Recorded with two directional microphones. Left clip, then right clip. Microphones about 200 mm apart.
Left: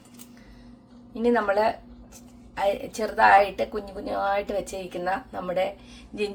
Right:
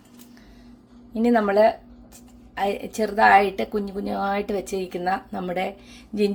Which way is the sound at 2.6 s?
40° right (ahead or behind).